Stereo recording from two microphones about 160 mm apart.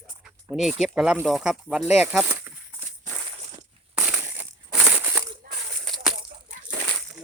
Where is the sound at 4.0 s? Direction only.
15° right (ahead or behind).